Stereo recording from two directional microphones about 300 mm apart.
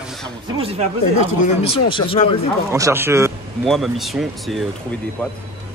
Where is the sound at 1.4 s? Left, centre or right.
Centre.